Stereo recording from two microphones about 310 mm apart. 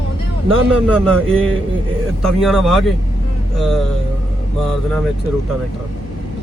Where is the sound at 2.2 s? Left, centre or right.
Centre.